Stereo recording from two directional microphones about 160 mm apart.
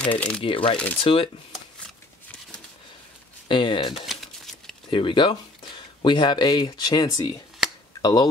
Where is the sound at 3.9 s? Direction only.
Centre (ahead or behind).